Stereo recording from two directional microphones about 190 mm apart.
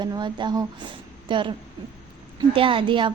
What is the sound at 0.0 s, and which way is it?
A woman's voice, 25° right (ahead or behind).